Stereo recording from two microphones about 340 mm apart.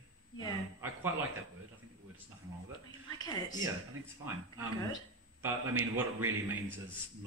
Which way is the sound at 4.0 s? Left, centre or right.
Right.